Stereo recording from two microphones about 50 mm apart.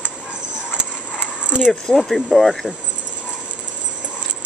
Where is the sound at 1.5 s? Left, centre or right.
Centre.